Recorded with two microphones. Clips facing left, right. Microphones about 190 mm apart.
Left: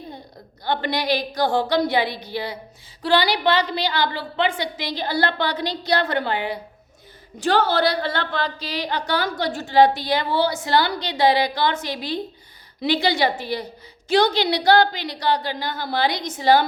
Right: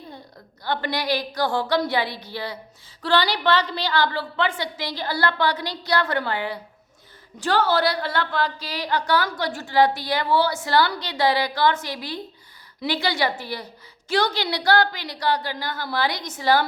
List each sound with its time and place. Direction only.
0.6 s a woman's voice: 20° left (ahead or behind)